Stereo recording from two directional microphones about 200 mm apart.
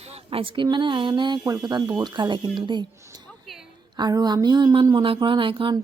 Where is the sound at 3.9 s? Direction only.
20° right (ahead or behind).